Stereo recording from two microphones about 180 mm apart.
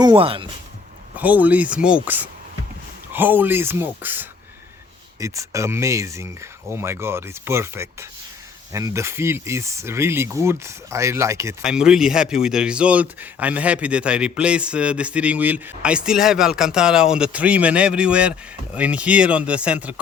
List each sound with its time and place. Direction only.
0.0 s speech: 25° right (ahead or behind)
1.1 s speech: 10° right (ahead or behind)
2.0 s a sound: 10° right (ahead or behind)
3.1 s speech: 10° right (ahead or behind)
11.6 s a man's voice: 5° right (ahead or behind)